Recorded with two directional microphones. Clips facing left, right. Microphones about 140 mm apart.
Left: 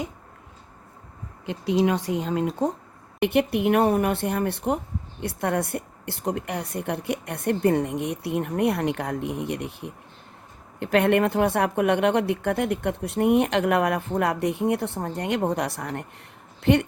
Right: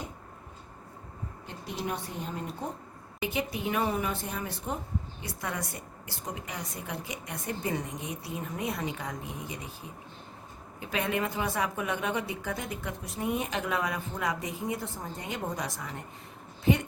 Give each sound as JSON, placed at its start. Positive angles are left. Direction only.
{"t": 1.5, "sound": "speech", "side_deg": 90}
{"t": 3.2, "sound": "speech", "side_deg": 65}